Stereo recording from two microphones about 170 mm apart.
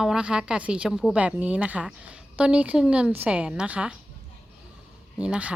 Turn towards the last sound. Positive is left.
turn(degrees=-5)  # may be behind; listen again after turning